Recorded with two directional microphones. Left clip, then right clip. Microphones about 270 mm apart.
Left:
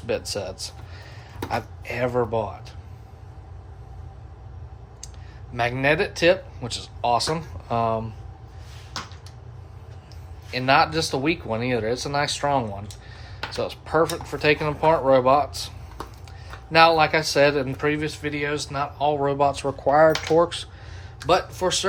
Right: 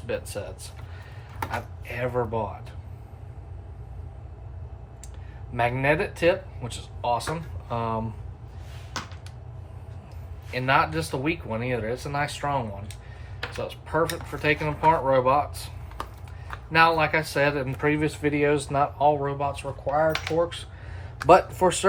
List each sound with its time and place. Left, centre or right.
0.1 s speech: centre
1.5 s speech: centre
5.5 s speech: centre
10.5 s speech: centre
16.7 s speech: centre
19.2 s speech: centre
21.2 s speech: centre